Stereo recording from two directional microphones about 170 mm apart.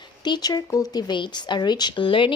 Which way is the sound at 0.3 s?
25° left (ahead or behind).